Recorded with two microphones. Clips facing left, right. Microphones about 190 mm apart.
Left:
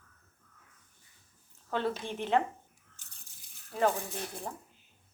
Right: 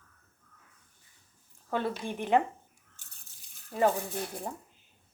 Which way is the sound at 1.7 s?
10° right (ahead or behind).